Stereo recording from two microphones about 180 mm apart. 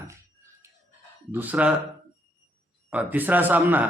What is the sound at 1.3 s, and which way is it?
Speech, 10° right (ahead or behind).